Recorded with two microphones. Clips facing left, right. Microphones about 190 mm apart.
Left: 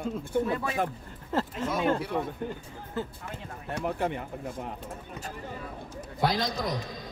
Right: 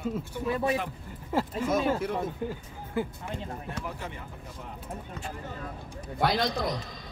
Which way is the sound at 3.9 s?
60° left (ahead or behind).